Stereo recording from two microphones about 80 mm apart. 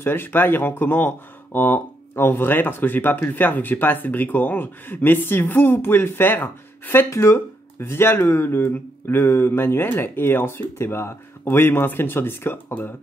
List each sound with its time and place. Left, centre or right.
0.0 s speech: left